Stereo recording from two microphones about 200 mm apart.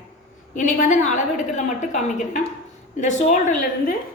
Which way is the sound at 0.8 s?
40° left (ahead or behind).